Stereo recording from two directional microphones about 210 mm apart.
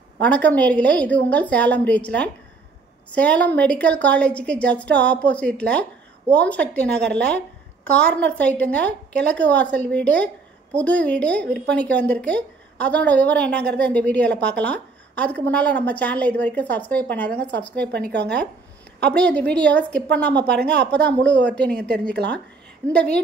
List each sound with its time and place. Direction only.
0.2 s a woman's voice: 5° left (ahead or behind)
17.9 s speech: 50° right (ahead or behind)
19.1 s a woman's voice: 5° left (ahead or behind)
22.1 s speech: 55° right (ahead or behind)
22.9 s a woman's voice: 5° left (ahead or behind)